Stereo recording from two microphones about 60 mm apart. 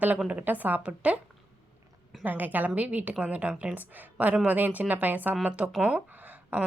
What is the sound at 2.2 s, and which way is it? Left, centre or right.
A woman's voice, right.